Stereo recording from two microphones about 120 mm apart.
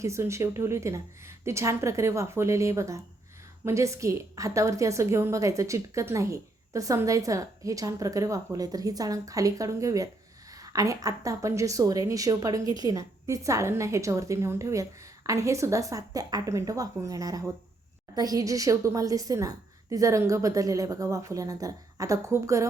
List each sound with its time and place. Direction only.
0.0 s a woman's voice: 25° right (ahead or behind)